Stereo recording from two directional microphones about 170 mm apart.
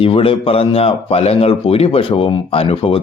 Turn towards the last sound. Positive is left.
turn(degrees=35)  # may be behind; listen again after turning